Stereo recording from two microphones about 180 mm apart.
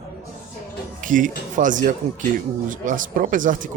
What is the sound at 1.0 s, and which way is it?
Speech, 45° right (ahead or behind).